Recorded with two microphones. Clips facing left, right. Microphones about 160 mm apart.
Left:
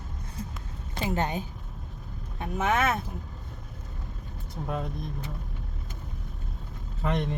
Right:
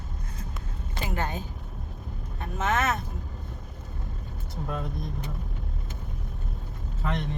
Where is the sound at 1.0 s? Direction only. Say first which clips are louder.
Left 3 dB; 25° left (ahead or behind).